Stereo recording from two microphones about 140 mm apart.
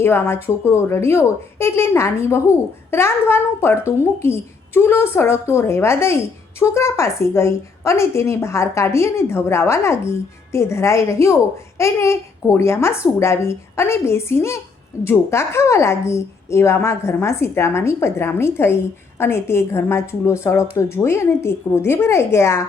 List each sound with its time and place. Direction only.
0.0 s a woman's voice: 15° left (ahead or behind)